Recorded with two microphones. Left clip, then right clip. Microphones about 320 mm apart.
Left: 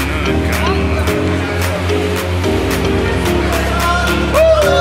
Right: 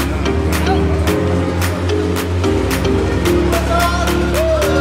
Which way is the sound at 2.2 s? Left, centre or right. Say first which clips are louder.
Left 1 dB; centre.